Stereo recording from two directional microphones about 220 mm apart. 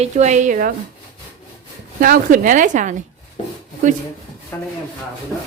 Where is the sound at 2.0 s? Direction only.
40° right (ahead or behind).